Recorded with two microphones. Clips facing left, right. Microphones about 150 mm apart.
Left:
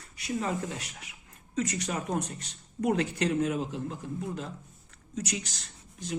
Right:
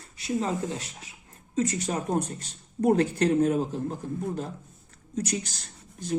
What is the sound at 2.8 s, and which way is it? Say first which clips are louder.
Speech: right 5 dB; 40° right (ahead or behind).